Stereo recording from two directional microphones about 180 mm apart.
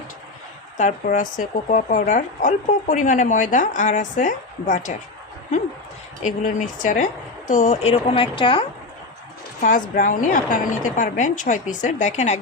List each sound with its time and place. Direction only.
0.8 s speech: 45° left (ahead or behind)
6.2 s speech: 45° left (ahead or behind); by 8.6 s 30° left (ahead or behind)
9.6 s speech: 50° left (ahead or behind)